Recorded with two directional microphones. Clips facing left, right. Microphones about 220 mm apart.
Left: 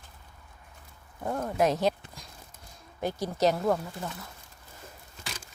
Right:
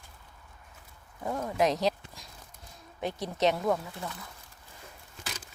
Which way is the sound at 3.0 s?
Centre (ahead or behind).